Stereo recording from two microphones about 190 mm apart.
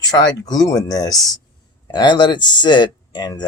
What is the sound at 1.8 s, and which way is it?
Speech, 25° left (ahead or behind).